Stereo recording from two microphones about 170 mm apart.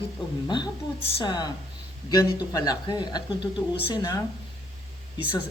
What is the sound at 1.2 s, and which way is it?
Speech, 25° left (ahead or behind).